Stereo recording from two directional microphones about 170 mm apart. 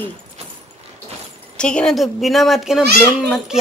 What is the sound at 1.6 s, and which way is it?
A woman's voice, 5° left (ahead or behind).